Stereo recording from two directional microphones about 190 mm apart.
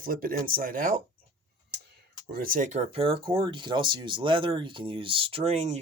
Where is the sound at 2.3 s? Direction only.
50° right (ahead or behind).